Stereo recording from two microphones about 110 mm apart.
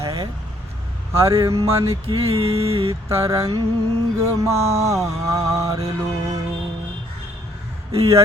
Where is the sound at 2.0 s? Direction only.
65° right (ahead or behind).